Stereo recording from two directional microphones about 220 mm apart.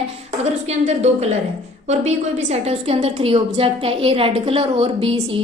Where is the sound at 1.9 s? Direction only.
30° right (ahead or behind).